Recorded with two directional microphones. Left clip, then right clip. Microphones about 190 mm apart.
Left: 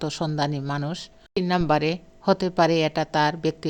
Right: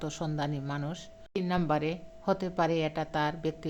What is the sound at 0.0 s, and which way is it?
Speech, 30° left (ahead or behind).